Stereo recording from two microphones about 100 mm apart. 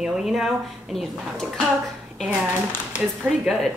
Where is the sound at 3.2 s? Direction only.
5° right (ahead or behind).